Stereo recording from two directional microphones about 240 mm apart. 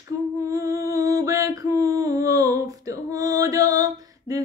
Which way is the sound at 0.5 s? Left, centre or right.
Centre.